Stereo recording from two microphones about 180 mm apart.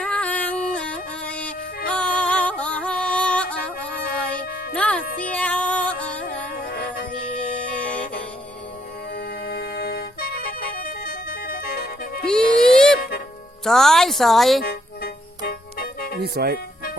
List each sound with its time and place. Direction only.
0.0 s music: 5° left (ahead or behind)
6.6 s music: 55° left (ahead or behind)
9.1 s music: 60° left (ahead or behind)
12.2 s a sound: 5° left (ahead or behind)
13.0 s music: 60° left (ahead or behind)
13.7 s a woman's voice: centre (ahead or behind)
14.6 s music: 60° left (ahead or behind)
16.2 s speech: 60° right (ahead or behind)